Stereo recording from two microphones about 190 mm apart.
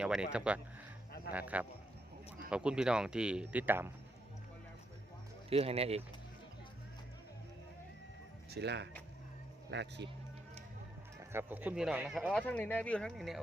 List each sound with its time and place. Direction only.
0.0 s speech: 5° right (ahead or behind)
5.5 s speech: 30° right (ahead or behind)
8.4 s speech: 60° right (ahead or behind)
11.2 s speech: 10° right (ahead or behind)